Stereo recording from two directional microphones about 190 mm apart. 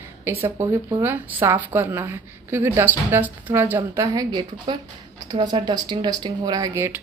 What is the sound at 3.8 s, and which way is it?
A woman's voice, 20° right (ahead or behind).